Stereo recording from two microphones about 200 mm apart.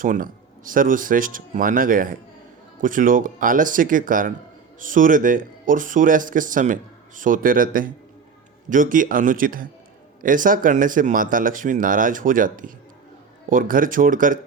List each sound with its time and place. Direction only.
0.0 s speech: 40° right (ahead or behind)